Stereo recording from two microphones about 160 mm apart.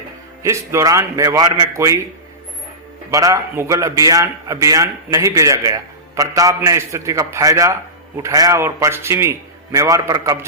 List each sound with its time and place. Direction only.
0.4 s a man's voice: 20° right (ahead or behind)
3.1 s a man's voice: 20° right (ahead or behind)